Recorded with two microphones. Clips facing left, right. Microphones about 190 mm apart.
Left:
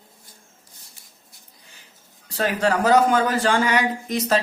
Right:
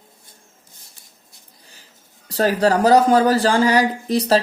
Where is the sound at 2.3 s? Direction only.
35° right (ahead or behind).